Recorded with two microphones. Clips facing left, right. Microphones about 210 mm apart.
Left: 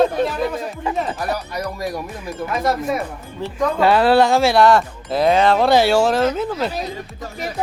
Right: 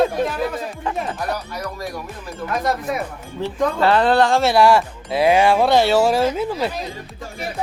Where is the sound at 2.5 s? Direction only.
Centre (ahead or behind).